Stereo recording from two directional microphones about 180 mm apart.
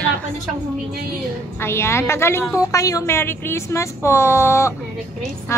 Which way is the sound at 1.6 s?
15° left (ahead or behind).